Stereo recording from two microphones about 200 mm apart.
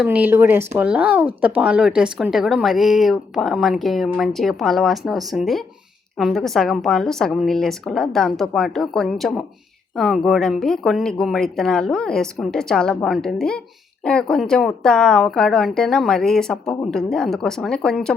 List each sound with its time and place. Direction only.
0.0 s speech: 5° right (ahead or behind)